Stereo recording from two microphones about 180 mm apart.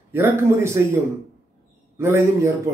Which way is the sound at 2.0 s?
15° right (ahead or behind).